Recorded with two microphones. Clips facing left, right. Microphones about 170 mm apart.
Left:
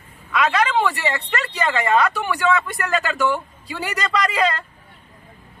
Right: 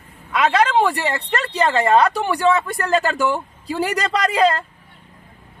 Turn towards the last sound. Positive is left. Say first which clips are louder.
# right 3 dB
turn(degrees=-35)  # may be behind; listen again after turning